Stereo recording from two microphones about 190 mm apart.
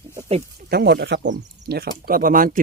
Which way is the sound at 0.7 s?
60° right (ahead or behind).